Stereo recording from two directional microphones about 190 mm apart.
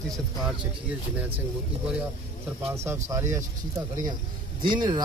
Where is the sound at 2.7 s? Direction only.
15° right (ahead or behind).